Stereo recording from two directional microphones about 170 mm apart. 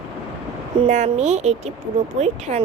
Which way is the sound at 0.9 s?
45° right (ahead or behind).